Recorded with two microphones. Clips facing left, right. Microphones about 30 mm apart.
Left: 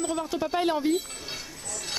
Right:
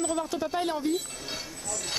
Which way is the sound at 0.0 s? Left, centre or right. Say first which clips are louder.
Left 1 dB; centre.